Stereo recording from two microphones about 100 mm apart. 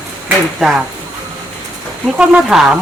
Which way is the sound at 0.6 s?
5° right (ahead or behind).